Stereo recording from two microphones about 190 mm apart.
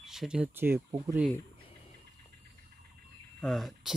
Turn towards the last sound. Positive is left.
turn(degrees=0)  # may be behind; listen again after turning